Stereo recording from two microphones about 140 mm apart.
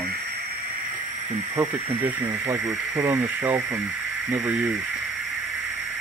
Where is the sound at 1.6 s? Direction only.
15° right (ahead or behind).